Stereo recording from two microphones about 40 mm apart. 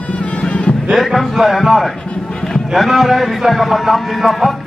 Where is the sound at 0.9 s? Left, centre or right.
Centre.